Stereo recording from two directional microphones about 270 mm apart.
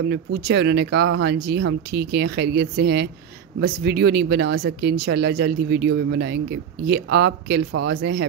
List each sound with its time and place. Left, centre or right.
0.0 s speech: right